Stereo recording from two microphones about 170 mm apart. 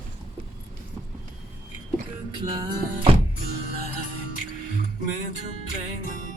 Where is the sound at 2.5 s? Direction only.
25° right (ahead or behind).